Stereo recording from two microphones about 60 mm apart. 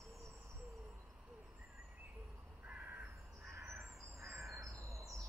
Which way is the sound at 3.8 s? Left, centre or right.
Right.